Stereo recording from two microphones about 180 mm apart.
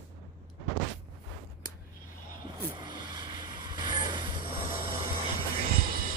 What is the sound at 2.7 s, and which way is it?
Vehicle, 25° right (ahead or behind).